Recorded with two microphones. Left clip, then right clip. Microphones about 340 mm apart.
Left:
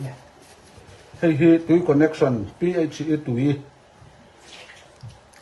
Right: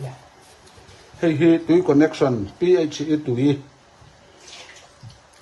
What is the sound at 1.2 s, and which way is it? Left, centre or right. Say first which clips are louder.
Speech: even; right.